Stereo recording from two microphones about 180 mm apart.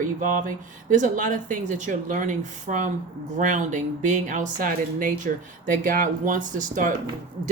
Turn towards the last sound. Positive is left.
turn(degrees=-45)  # may be behind; listen again after turning